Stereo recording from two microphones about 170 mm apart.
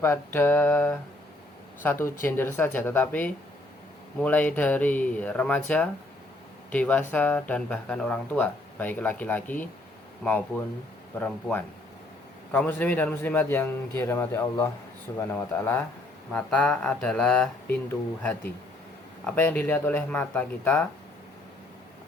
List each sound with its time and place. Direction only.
0.0 s speech: 15° left (ahead or behind)
11.2 s speech: 10° left (ahead or behind)